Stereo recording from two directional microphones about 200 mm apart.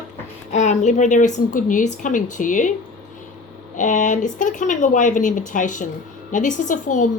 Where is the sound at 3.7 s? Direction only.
40° left (ahead or behind).